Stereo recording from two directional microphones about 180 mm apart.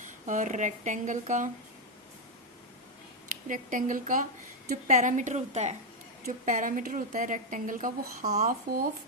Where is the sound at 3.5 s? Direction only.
45° right (ahead or behind).